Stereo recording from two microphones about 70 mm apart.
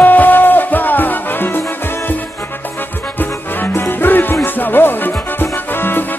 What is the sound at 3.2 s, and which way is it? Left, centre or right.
Music, left.